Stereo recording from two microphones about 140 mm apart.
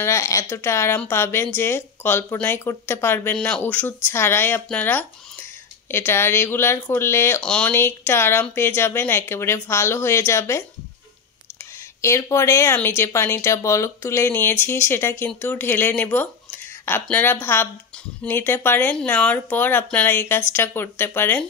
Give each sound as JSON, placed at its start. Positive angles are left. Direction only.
{"t": 0.0, "sound": "speech", "side_deg": 20}
{"t": 12.0, "sound": "speech", "side_deg": 20}